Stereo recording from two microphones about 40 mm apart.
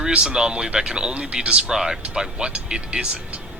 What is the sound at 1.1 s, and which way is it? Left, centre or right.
Speech, right.